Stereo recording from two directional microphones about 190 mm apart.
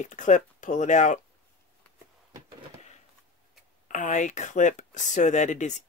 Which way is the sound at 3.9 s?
40° left (ahead or behind).